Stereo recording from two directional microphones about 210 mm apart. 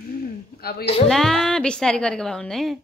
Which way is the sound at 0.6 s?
45° left (ahead or behind).